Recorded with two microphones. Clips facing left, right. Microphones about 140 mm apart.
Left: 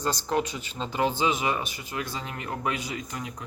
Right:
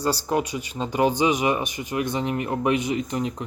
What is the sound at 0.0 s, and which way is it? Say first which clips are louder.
Speech: right 3 dB; 10° right (ahead or behind).